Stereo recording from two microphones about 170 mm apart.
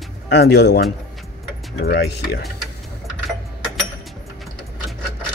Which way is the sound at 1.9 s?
80° left.